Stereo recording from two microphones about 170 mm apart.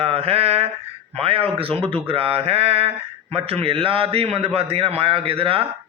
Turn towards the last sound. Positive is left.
turn(degrees=-35)  # may be behind; listen again after turning